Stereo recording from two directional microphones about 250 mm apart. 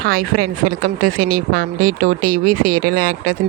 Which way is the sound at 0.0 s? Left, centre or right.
Right.